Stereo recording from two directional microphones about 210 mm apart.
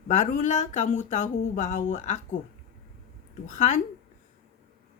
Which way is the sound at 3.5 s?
35° left (ahead or behind).